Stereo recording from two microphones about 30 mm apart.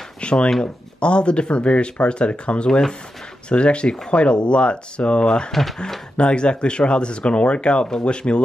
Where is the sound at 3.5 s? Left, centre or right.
Left.